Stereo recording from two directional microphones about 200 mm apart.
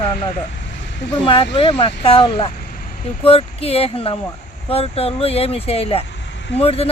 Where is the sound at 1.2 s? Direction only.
25° left (ahead or behind).